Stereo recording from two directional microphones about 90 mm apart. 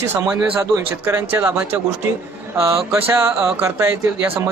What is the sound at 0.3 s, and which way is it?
Speech, 40° right (ahead or behind).